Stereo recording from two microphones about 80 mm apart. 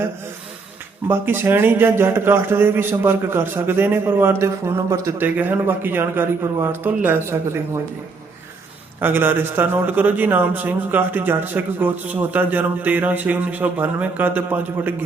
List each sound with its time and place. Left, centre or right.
1.0 s a man's voice: right
5.2 s a man's voice: right
9.0 s a man's voice: right